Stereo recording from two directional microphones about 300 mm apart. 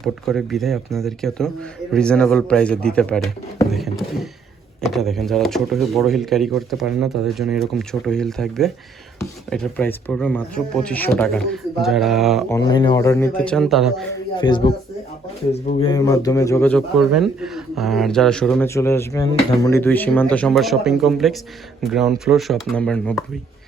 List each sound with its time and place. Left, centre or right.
0.0 s a man's voice: centre
12.5 s speech: centre
14.3 s speech: centre
15.9 s a man's voice: centre